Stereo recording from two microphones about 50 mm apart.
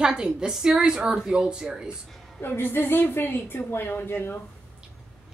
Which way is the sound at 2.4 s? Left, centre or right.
Left.